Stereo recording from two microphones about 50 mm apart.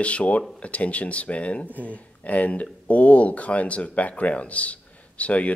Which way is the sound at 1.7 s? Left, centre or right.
Right.